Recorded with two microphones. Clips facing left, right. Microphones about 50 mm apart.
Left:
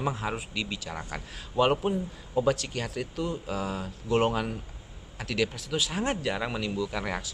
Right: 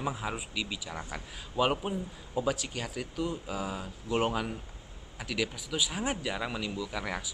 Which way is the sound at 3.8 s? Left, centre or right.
Centre.